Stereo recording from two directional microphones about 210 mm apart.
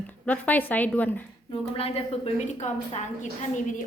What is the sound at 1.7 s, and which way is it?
A woman's voice, 25° left (ahead or behind).